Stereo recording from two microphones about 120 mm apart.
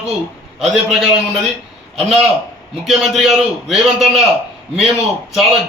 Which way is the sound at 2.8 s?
Centre (ahead or behind).